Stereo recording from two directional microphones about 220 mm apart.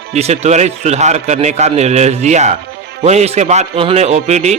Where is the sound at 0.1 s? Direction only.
30° right (ahead or behind).